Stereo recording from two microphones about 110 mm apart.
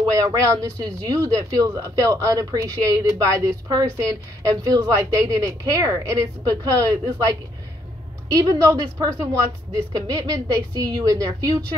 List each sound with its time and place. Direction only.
0.1 s speech: 30° right (ahead or behind)